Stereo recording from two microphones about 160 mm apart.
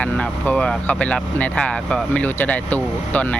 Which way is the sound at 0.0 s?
5° left (ahead or behind).